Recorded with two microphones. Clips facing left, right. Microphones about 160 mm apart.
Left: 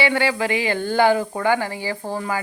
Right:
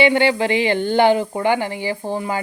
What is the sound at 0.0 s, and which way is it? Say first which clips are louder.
A woman's voice: right 5 dB; 25° right (ahead or behind).